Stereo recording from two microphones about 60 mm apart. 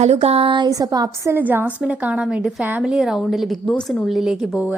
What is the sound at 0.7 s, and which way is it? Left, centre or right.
Speech, right.